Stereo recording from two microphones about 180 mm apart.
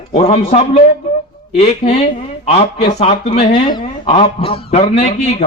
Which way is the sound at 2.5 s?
35° left (ahead or behind).